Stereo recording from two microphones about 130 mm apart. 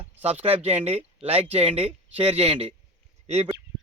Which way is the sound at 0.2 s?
50° right (ahead or behind).